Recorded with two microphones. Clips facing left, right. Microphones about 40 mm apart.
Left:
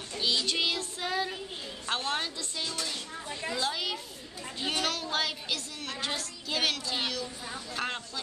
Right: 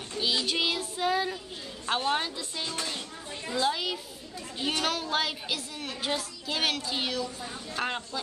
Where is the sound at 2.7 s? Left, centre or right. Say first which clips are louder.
Right 2 dB; right.